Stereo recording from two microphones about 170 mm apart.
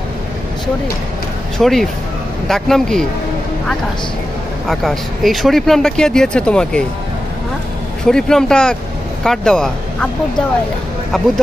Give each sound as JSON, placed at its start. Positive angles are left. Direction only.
{"t": 1.6, "sound": "speech", "side_deg": 0}
{"t": 4.6, "sound": "speech", "side_deg": 0}
{"t": 8.0, "sound": "speech", "side_deg": 5}